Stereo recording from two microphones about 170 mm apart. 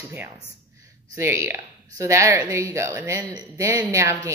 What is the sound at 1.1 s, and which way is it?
A woman's voice, 15° right (ahead or behind).